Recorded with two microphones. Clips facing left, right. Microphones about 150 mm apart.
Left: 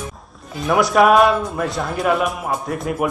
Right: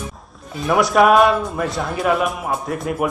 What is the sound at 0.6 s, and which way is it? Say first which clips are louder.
Speech: even; centre (ahead or behind).